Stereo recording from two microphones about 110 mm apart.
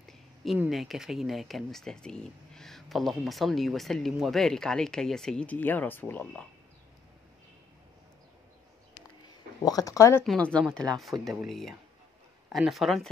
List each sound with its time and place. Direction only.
0.7 s speech: centre (ahead or behind); by 6.4 s 15° left (ahead or behind)
9.7 s speech: 35° left (ahead or behind)
10.2 s speech: 10° left (ahead or behind)